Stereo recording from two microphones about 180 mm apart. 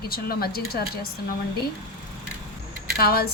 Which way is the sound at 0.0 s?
55° left (ahead or behind).